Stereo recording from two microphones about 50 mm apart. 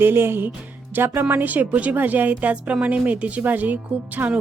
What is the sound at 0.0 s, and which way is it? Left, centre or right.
Speech, right.